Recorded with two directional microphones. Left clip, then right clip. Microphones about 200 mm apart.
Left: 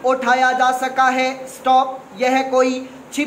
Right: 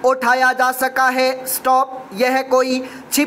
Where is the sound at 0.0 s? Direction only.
30° right (ahead or behind).